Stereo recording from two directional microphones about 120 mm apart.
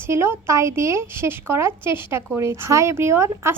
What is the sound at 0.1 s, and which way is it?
A woman's voice, 20° right (ahead or behind).